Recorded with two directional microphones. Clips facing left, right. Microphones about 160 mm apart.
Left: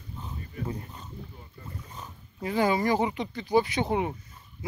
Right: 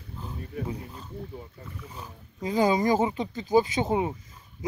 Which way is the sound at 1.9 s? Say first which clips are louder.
Right 1 dB; 15° right (ahead or behind).